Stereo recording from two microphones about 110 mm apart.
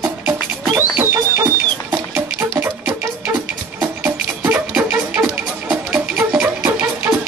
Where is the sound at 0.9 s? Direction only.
20° right (ahead or behind).